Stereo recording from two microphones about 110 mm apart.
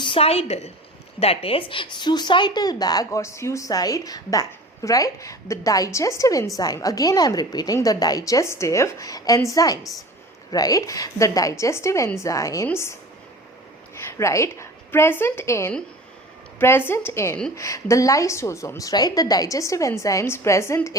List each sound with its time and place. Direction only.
0.0 s a woman's voice: 55° left (ahead or behind); by 0.7 s 75° left (ahead or behind)
1.2 s a woman's voice: 60° left (ahead or behind); by 20.9 s 25° left (ahead or behind)